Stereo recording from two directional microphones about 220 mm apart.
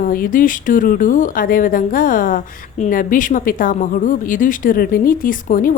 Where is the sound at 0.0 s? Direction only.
40° left (ahead or behind).